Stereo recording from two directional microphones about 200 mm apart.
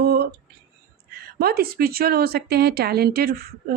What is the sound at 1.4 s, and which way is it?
Speech, 50° right (ahead or behind).